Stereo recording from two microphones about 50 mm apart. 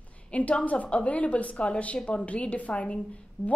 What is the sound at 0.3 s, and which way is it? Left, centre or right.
Speech, left.